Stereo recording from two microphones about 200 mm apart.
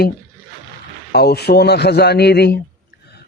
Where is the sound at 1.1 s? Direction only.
55° left (ahead or behind).